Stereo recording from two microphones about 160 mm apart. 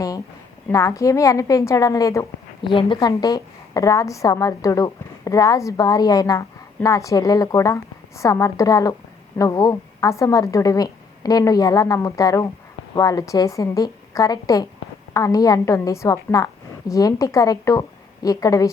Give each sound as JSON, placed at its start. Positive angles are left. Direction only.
{"t": 0.7, "sound": "a woman's voice", "side_deg": 20}